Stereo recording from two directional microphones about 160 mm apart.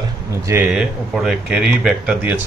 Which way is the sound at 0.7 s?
5° right (ahead or behind).